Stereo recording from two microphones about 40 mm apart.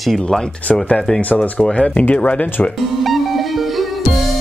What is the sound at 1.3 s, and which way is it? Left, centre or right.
Speech, left.